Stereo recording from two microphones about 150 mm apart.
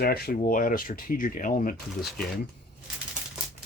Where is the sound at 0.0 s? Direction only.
90° left; by 1.7 s 65° left (ahead or behind).